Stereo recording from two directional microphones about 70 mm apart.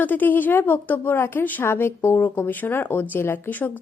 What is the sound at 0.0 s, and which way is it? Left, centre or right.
A woman's voice, left.